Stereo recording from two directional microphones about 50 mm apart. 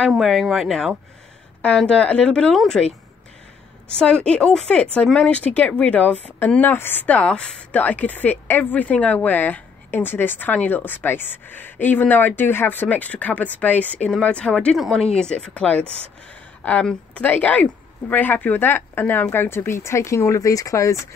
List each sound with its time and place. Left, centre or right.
0.1 s speech: centre
1.9 s speech: left
4.0 s speech: centre
5.2 s a woman's voice: left
7.1 s speech: left
7.8 s a woman's voice: left
8.8 s a woman's voice: left
12.8 s a woman's voice: left
15.5 s a woman's voice: left
20.2 s speech: left